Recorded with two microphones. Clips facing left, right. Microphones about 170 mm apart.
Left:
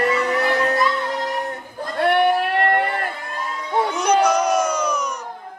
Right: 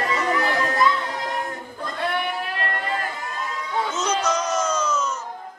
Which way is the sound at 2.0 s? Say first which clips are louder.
Left 10 dB; 65° left (ahead or behind).